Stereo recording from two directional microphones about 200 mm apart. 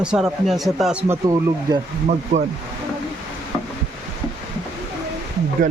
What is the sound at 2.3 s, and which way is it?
Speech, 35° right (ahead or behind).